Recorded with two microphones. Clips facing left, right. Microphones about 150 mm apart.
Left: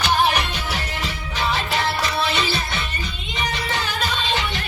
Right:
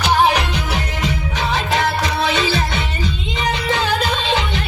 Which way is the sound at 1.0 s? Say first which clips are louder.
Right 3 dB; 90° right.